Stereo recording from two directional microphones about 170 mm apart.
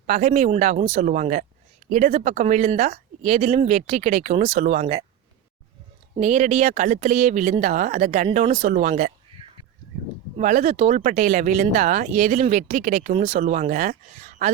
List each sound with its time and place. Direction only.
0.1 s speech: 50° right (ahead or behind)
6.1 s speech: 45° right (ahead or behind)
10.3 s speech: 45° right (ahead or behind)